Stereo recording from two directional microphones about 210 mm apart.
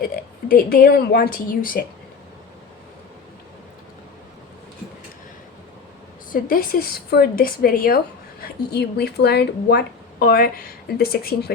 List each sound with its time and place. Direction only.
0.0 s a woman's voice: 45° left (ahead or behind)
6.3 s a woman's voice: 45° left (ahead or behind)